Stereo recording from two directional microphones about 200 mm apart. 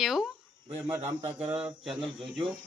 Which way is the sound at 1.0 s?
30° right (ahead or behind).